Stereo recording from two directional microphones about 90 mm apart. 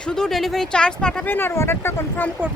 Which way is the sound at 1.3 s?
25° left (ahead or behind).